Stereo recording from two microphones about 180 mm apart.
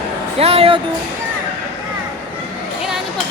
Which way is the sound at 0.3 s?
35° right (ahead or behind).